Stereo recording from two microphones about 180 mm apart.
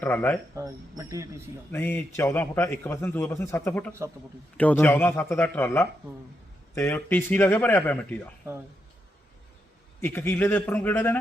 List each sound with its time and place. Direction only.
0.0 s a man's voice: 10° left (ahead or behind)
0.5 s speech: 15° right (ahead or behind)
1.7 s a man's voice: 10° left (ahead or behind)
10.0 s a man's voice: 15° left (ahead or behind)